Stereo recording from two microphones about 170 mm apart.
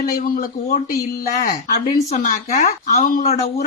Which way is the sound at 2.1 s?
45° left (ahead or behind).